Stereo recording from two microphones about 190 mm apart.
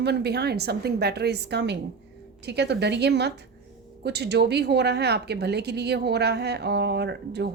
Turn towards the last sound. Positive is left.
turn(degrees=-60)  # may be behind; listen again after turning